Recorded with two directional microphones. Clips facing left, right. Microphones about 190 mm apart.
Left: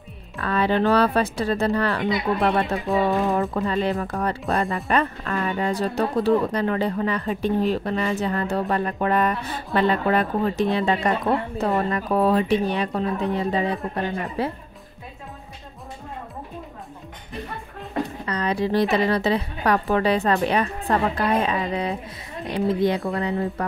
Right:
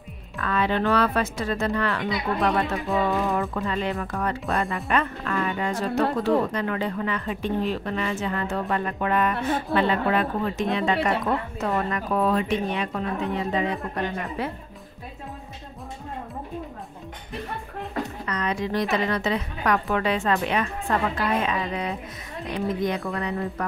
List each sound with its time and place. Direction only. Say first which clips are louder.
0.4 s a woman's voice: left 3 dB; 35° left (ahead or behind)
18.2 s a woman's voice: left 4 dB; 30° left (ahead or behind)